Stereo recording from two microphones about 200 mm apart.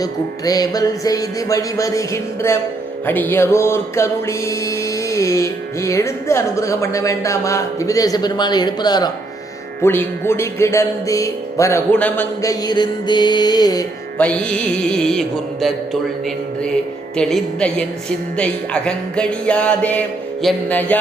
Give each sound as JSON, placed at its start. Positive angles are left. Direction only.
{"t": 0.0, "sound": "music", "side_deg": 20}
{"t": 14.2, "sound": "music", "side_deg": 5}